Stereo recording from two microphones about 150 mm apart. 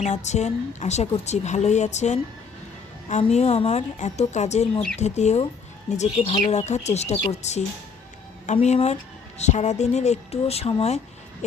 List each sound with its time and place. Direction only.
0.0 s a woman's voice: 50° left (ahead or behind)
8.6 s a woman's voice: 45° left (ahead or behind)